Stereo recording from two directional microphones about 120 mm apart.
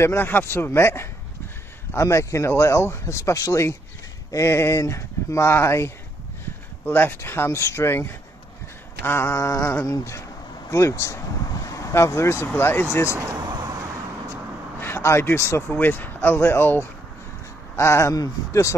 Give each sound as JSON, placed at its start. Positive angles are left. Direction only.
{"t": 0.0, "sound": "speech", "side_deg": 20}
{"t": 13.2, "sound": "vehicle", "side_deg": -30}
{"t": 14.8, "sound": "speech", "side_deg": 20}